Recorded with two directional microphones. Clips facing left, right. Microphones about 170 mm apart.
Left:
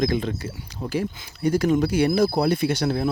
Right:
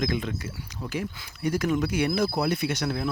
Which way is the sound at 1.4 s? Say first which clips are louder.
Left 5 dB; 30° left (ahead or behind).